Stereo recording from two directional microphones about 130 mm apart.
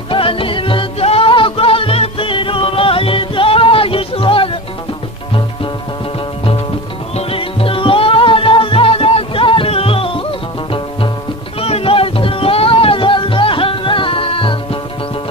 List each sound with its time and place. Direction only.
0.1 s music: 45° left (ahead or behind)
7.2 s music: 45° left (ahead or behind)
11.6 s music: 45° left (ahead or behind)